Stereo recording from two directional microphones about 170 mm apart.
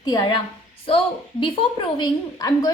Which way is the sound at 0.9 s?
30° left (ahead or behind).